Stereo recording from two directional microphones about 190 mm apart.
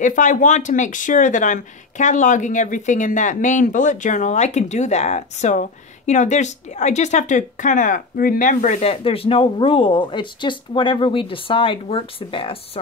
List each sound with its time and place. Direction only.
0.0 s speech: 40° left (ahead or behind)